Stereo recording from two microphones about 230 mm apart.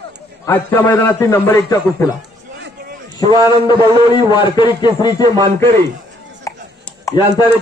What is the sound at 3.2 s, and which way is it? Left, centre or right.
A man's voice, centre.